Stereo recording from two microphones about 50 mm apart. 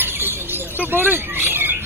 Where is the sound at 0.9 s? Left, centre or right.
Right.